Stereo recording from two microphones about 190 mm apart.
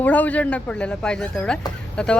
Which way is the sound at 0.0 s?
10° left (ahead or behind).